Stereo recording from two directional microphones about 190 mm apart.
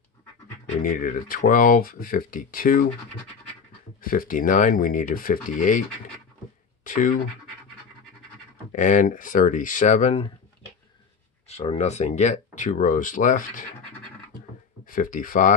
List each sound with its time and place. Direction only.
0.8 s speech: 45° left (ahead or behind)
4.0 s speech: 50° left (ahead or behind)
6.8 s a sound: 45° left (ahead or behind)
8.7 s speech: 40° left (ahead or behind)
11.4 s speech: 35° left (ahead or behind)
14.9 s speech: 45° left (ahead or behind)